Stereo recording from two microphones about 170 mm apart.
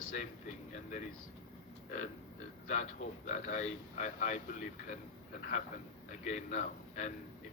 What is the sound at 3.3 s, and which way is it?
Speech, 45° left (ahead or behind).